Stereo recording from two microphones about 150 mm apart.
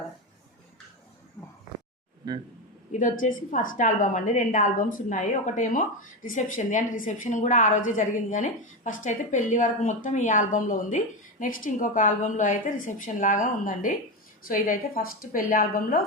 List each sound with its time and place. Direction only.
2.2 s speech: 25° right (ahead or behind)
3.0 s a woman's voice: 60° left (ahead or behind)